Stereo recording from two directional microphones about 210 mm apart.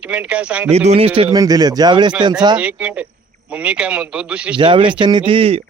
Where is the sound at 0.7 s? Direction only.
30° right (ahead or behind).